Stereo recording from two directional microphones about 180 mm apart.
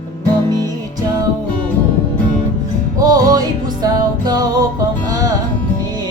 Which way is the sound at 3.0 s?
20° right (ahead or behind).